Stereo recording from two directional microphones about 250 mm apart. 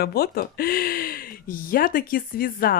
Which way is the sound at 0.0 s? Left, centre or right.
Left.